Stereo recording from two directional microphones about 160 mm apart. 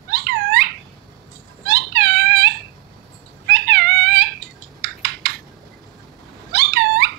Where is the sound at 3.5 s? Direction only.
90° right.